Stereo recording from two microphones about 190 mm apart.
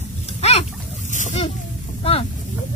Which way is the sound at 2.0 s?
30° left (ahead or behind).